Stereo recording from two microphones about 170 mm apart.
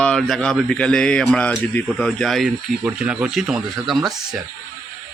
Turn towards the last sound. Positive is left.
turn(degrees=0)  # may be behind; listen again after turning